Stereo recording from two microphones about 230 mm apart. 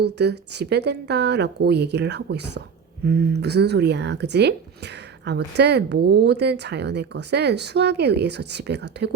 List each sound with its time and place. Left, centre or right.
0.0 s speech: right